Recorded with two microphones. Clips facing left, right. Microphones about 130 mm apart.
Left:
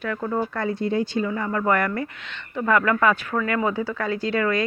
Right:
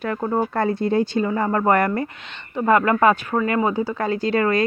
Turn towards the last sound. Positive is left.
turn(degrees=-40)  # may be behind; listen again after turning